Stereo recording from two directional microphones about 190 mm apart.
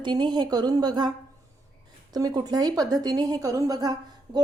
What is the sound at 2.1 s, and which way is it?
A woman's voice, 20° right (ahead or behind).